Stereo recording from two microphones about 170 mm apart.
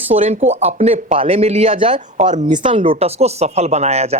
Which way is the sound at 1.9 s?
45° right (ahead or behind).